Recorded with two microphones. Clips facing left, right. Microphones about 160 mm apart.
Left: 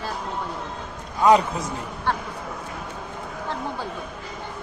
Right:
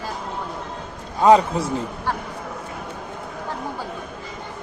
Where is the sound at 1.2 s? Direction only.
30° right (ahead or behind).